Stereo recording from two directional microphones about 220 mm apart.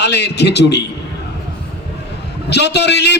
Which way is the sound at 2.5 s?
50° left (ahead or behind).